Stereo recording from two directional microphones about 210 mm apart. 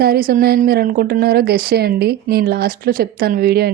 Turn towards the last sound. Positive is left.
turn(degrees=-45)  # may be behind; listen again after turning